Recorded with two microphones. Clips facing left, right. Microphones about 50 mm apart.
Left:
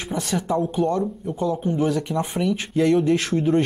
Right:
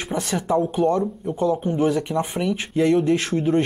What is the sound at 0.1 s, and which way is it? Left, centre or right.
Speech, right.